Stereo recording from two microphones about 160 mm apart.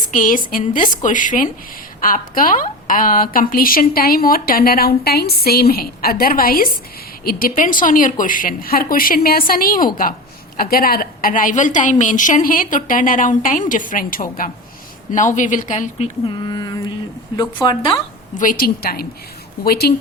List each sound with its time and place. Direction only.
0.1 s a woman's voice: 55° left (ahead or behind)
16.4 s speech: 25° left (ahead or behind)
18.3 s a woman's voice: 60° left (ahead or behind)